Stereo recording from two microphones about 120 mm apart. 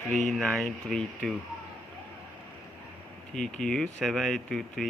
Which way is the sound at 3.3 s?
5° left (ahead or behind).